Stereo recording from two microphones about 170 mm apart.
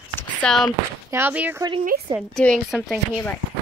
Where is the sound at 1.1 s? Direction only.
10° right (ahead or behind).